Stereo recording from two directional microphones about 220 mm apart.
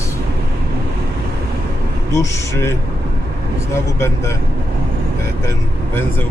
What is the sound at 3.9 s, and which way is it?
Speech, 15° left (ahead or behind).